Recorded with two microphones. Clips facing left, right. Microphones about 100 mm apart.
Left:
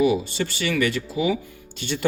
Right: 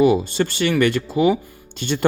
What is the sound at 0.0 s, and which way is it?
Speech, 50° right (ahead or behind).